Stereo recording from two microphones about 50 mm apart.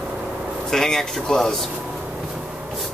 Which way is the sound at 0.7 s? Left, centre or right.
Centre.